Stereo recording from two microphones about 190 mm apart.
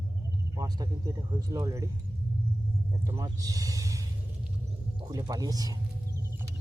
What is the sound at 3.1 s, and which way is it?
Speech, 15° right (ahead or behind).